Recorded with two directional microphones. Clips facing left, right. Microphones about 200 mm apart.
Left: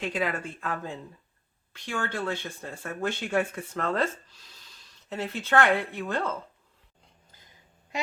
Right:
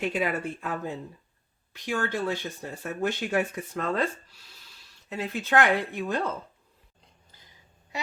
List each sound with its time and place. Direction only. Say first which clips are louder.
0.2 s speech: right 2 dB; 10° right (ahead or behind)